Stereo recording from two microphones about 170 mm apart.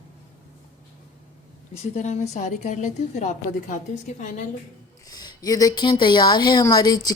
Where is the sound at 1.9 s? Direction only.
40° left (ahead or behind).